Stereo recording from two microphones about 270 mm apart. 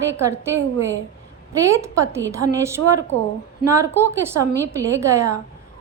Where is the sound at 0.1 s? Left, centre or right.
Centre.